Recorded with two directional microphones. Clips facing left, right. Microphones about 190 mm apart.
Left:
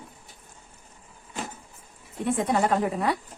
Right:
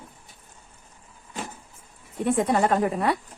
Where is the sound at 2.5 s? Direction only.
55° right (ahead or behind).